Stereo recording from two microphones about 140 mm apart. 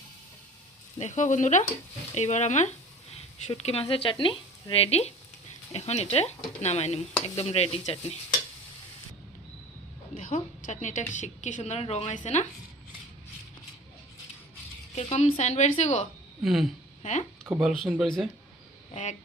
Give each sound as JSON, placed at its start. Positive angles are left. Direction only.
{"t": 0.9, "sound": "speech", "side_deg": 60}
{"t": 3.5, "sound": "speech", "side_deg": 45}
{"t": 10.2, "sound": "a woman's voice", "side_deg": 65}
{"t": 14.9, "sound": "speech", "side_deg": 45}
{"t": 16.4, "sound": "speech", "side_deg": 0}
{"t": 17.0, "sound": "speech", "side_deg": 55}
{"t": 17.5, "sound": "speech", "side_deg": -15}
{"t": 18.0, "sound": "speech", "side_deg": 0}